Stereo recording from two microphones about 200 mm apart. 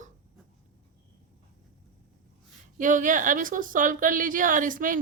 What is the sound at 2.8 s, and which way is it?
A woman's voice, 40° right (ahead or behind).